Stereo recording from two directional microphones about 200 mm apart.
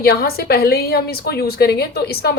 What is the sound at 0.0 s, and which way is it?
A woman's voice, 50° left (ahead or behind).